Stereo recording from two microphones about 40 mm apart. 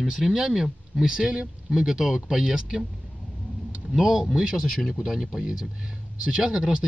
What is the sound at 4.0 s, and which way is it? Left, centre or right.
Speech, centre.